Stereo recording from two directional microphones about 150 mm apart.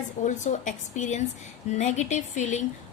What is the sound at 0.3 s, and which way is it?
A woman's voice, 55° left (ahead or behind).